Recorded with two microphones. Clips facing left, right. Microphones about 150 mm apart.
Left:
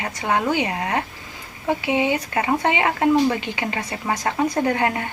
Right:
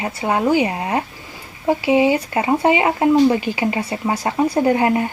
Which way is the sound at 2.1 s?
25° right (ahead or behind).